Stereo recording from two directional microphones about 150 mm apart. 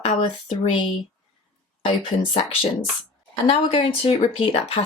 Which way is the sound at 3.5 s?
35° left (ahead or behind).